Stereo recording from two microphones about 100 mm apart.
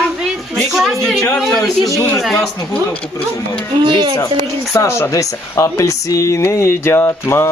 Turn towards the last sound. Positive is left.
turn(degrees=25)  # may be behind; listen again after turning